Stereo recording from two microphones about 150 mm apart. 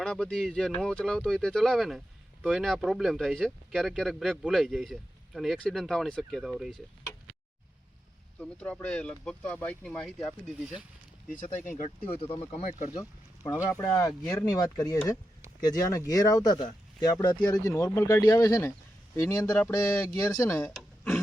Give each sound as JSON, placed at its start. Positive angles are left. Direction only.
{"t": 0.0, "sound": "speech", "side_deg": 5}
{"t": 8.4, "sound": "speech", "side_deg": 10}
{"t": 11.5, "sound": "speech", "side_deg": 55}
{"t": 12.0, "sound": "speech", "side_deg": 40}
{"t": 12.9, "sound": "speech", "side_deg": 25}
{"t": 20.6, "sound": "a sound", "side_deg": 5}